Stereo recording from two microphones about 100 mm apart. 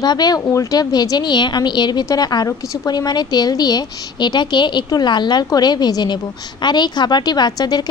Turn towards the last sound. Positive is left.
turn(degrees=45)  # may be behind; listen again after turning